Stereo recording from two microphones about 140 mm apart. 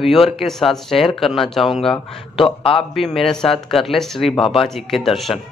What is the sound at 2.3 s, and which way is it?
Speech, 40° left (ahead or behind).